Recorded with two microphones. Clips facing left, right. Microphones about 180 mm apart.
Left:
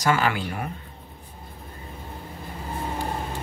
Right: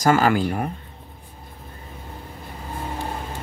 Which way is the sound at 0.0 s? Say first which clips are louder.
Right 5 dB; 45° right (ahead or behind).